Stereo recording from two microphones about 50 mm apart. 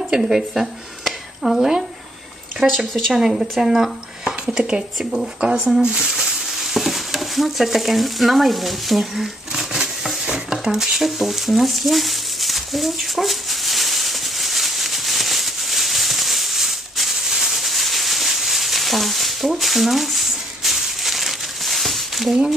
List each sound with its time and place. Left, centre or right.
0.1 s speech: centre
2.6 s speech: centre
4.2 s a sound: centre
4.9 s speech: centre
5.8 s stir: centre
10.2 s a sound: centre